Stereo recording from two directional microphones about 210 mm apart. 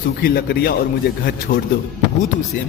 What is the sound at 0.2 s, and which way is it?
Speech, 45° left (ahead or behind).